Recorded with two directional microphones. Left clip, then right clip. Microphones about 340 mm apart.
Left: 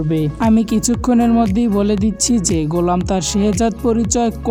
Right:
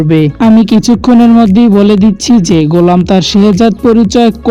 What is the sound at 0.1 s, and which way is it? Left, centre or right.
Speech, left.